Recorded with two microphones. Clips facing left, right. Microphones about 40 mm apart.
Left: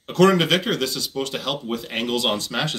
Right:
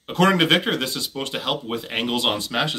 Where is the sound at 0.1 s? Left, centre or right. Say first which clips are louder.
Left 1 dB; right.